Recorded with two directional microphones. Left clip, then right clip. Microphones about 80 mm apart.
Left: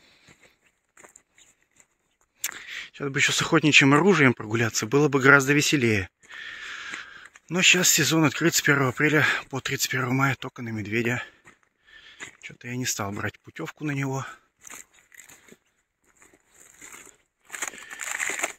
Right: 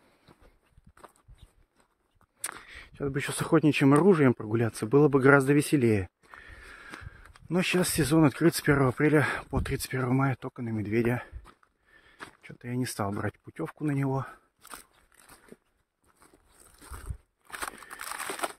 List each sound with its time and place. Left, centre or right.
3.0 s speech: centre
4.7 s speech: centre
5.5 s a sound: centre
7.4 s speech: right
9.9 s speech: centre
10.8 s speech: right
12.4 s speech: right
13.2 s speech: right
14.7 s a sound: centre
16.8 s a sound: centre